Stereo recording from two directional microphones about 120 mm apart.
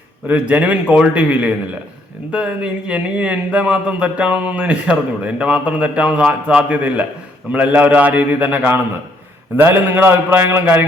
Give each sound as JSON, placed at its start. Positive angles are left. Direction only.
{"t": 0.3, "sound": "a man's voice", "side_deg": -10}